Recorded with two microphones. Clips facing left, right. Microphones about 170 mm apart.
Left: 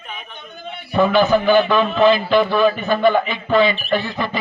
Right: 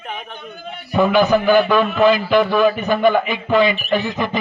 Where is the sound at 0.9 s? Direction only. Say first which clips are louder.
Even; 15° right (ahead or behind).